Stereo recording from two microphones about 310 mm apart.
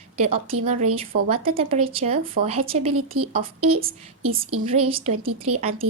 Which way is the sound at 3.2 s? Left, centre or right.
Right.